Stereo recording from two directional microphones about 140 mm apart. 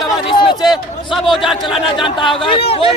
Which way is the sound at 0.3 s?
35° left (ahead or behind).